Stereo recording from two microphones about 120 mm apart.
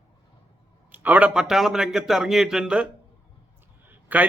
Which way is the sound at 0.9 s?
15° right (ahead or behind).